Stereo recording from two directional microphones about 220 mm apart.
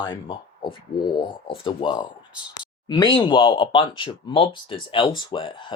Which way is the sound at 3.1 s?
20° left (ahead or behind).